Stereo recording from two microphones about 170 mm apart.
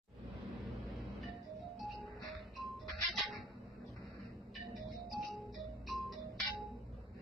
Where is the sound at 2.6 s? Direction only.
Centre (ahead or behind).